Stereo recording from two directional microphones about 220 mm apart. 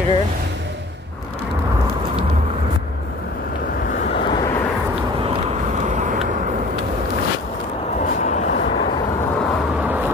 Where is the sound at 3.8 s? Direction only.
35° left (ahead or behind).